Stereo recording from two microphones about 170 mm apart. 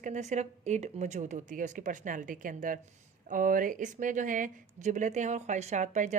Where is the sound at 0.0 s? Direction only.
45° right (ahead or behind).